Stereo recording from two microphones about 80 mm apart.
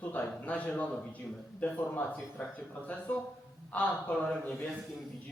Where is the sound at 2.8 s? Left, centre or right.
Centre.